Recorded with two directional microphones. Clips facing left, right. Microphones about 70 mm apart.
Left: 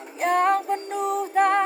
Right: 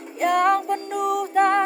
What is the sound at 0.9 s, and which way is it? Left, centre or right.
Music, right.